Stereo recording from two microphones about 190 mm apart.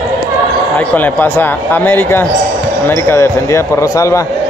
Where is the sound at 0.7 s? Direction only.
10° left (ahead or behind).